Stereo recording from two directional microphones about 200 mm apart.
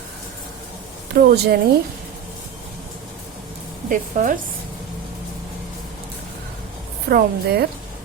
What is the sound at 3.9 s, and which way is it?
Speech, 40° right (ahead or behind).